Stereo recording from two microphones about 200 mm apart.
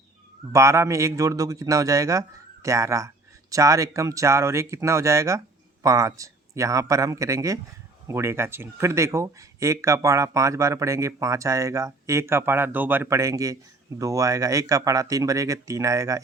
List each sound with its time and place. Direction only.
0.5 s speech: 15° right (ahead or behind)